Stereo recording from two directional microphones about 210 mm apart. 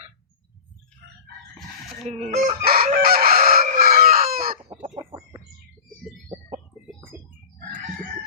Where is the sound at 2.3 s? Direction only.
40° right (ahead or behind).